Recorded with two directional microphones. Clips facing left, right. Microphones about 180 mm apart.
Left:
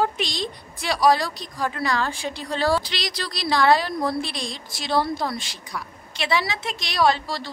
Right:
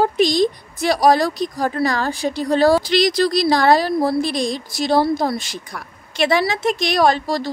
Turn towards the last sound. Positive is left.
turn(degrees=-45)  # may be behind; listen again after turning